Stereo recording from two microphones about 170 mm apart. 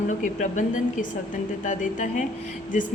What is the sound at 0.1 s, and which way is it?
A woman's voice, 45° left (ahead or behind).